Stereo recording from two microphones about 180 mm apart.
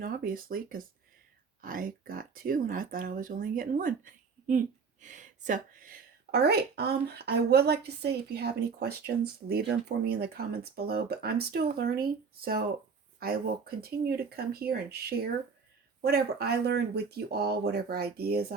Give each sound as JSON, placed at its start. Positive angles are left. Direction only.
{"t": 0.0, "sound": "speech", "side_deg": -50}
{"t": 6.3, "sound": "a woman's voice", "side_deg": -60}